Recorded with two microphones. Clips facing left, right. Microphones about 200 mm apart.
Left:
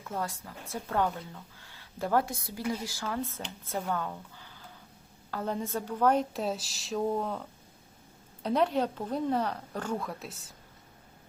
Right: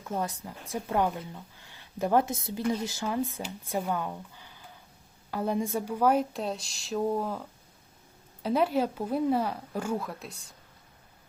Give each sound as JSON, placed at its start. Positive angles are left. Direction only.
{"t": 0.1, "sound": "speech", "side_deg": -20}